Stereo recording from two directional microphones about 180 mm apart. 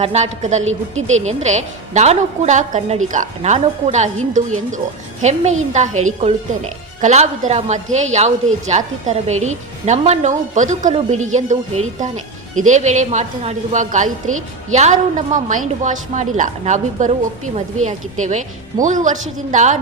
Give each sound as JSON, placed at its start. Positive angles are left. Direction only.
{"t": 0.0, "sound": "a woman's voice", "side_deg": -40}
{"t": 0.6, "sound": "a woman's voice", "side_deg": -90}
{"t": 1.1, "sound": "a woman's voice", "side_deg": -40}